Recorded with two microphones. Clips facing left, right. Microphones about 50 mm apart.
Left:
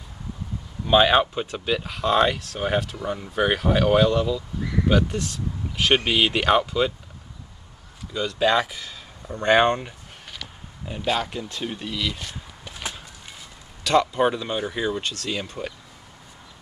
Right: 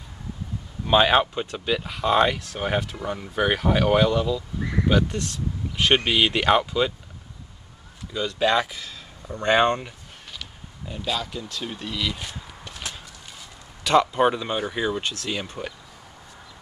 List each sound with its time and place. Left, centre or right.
0.8 s speech: centre
5.1 s a sound: centre
5.9 s speech: centre
8.1 s speech: centre
10.9 s speech: left
11.6 s speech: centre
12.8 s a sound: left
13.8 s speech: centre